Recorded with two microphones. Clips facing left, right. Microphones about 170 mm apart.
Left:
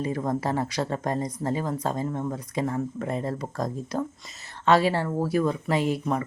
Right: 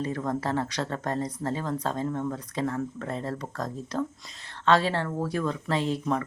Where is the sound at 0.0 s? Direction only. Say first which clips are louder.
Left 2 dB; 10° left (ahead or behind).